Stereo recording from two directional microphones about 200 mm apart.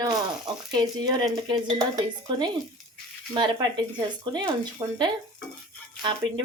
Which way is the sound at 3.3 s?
20° right (ahead or behind).